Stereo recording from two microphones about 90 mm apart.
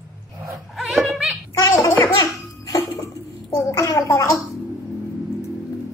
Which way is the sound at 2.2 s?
45° left (ahead or behind).